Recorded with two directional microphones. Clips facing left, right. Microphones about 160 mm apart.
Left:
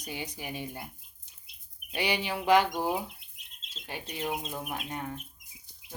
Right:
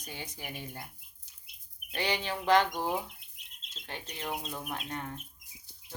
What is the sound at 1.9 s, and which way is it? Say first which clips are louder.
Bird: left 2 dB; 10° left (ahead or behind).